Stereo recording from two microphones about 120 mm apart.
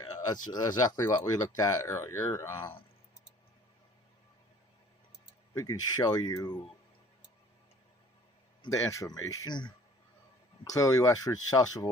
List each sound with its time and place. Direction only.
0.5 s speech: 35° left (ahead or behind)
5.5 s speech: 30° left (ahead or behind)
8.7 s speech: 25° left (ahead or behind)